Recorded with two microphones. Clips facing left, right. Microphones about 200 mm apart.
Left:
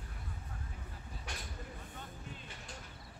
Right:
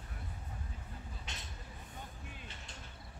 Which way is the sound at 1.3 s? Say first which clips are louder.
Left 5 dB; 20° right (ahead or behind).